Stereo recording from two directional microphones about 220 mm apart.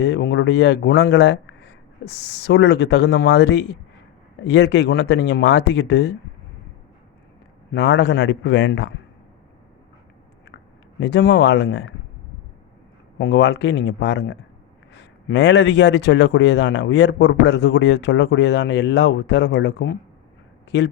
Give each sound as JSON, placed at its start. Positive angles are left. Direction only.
{"t": 0.0, "sound": "speech", "side_deg": 50}
{"t": 7.7, "sound": "speech", "side_deg": 50}
{"t": 11.0, "sound": "speech", "side_deg": 55}
{"t": 13.1, "sound": "speech", "side_deg": 50}